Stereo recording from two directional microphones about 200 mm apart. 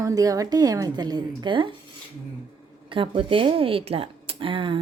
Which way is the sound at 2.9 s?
25° right (ahead or behind).